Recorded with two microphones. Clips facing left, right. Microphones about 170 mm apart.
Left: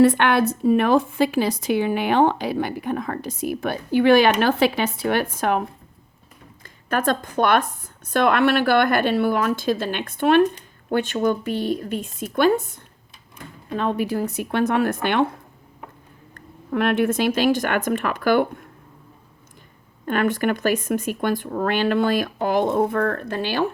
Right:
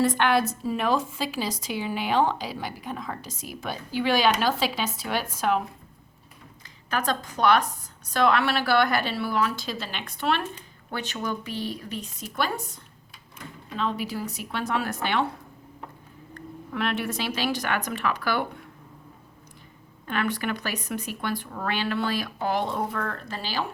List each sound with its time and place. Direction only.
0.0 s a woman's voice: 60° left (ahead or behind)
16.3 s speech: 55° left (ahead or behind)
20.1 s speech: 50° left (ahead or behind)